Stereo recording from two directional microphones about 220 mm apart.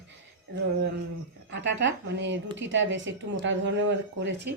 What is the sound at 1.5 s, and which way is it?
Speech, 55° right (ahead or behind).